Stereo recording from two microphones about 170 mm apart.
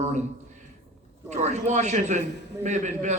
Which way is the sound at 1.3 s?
40° right (ahead or behind).